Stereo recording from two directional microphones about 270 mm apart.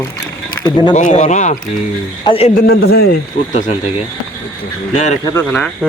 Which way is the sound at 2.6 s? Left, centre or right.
Left.